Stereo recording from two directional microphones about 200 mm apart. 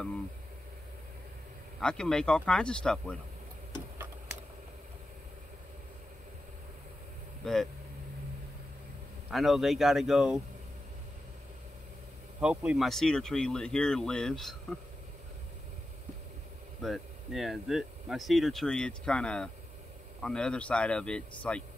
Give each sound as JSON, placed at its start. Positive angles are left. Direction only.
{"t": 1.8, "sound": "speech", "side_deg": 5}
{"t": 7.4, "sound": "speech", "side_deg": 5}
{"t": 9.3, "sound": "speech", "side_deg": 0}
{"t": 12.4, "sound": "speech", "side_deg": -5}
{"t": 16.8, "sound": "speech", "side_deg": 0}